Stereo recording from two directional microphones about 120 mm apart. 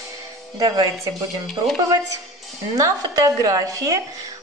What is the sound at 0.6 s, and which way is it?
Speech, 30° right (ahead or behind).